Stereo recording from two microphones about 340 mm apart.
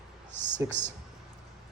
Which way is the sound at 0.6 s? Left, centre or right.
Centre.